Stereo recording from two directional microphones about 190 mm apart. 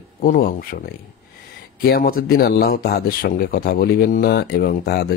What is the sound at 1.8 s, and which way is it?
Speech, 50° left (ahead or behind).